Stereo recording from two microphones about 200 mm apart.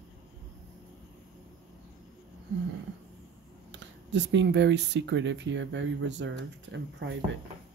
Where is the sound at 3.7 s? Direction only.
65° right (ahead or behind).